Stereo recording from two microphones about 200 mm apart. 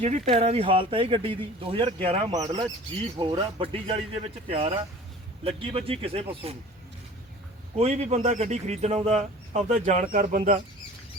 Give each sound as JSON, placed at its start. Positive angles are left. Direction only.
{"t": 0.0, "sound": "speech", "side_deg": -35}
{"t": 7.8, "sound": "speech", "side_deg": -30}